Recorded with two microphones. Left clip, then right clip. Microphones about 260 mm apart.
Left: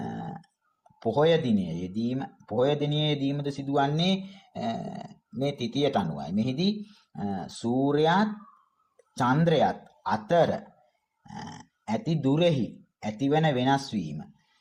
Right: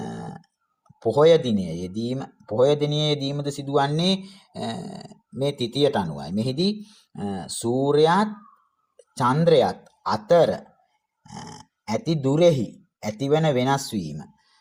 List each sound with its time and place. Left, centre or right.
1.0 s speech: right
11.9 s speech: right